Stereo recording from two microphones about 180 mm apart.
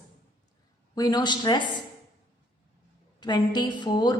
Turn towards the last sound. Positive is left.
turn(degrees=25)  # may be behind; listen again after turning